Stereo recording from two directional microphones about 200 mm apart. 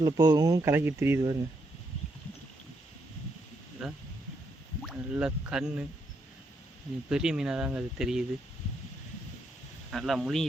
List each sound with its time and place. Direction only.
0.0 s speech: 20° right (ahead or behind)
3.8 s speech: centre (ahead or behind)
4.9 s speech: 5° right (ahead or behind)
7.1 s speech: 5° right (ahead or behind)
9.9 s speech: centre (ahead or behind)